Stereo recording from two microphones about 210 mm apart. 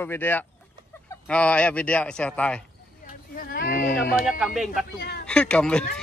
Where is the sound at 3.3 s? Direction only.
45° left (ahead or behind).